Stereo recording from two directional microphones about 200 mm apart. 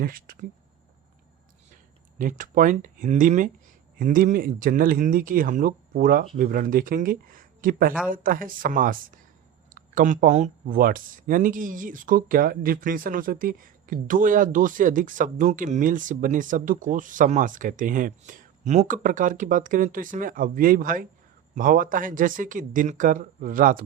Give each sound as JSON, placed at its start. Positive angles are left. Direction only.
{"t": 0.0, "sound": "speech", "side_deg": -45}
{"t": 2.4, "sound": "speech", "side_deg": -40}